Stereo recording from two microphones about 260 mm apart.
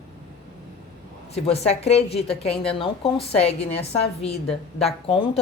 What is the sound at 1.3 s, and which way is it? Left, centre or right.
A woman's voice, left.